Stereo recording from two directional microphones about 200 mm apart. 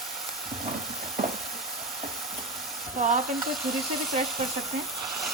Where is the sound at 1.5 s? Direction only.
Centre (ahead or behind).